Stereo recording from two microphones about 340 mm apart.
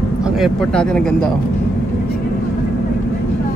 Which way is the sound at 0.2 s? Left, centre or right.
Centre.